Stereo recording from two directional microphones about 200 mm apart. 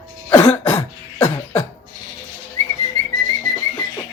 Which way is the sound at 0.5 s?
20° left (ahead or behind).